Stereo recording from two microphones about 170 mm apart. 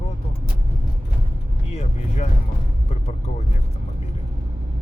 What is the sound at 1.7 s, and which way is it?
Speech, 40° left (ahead or behind).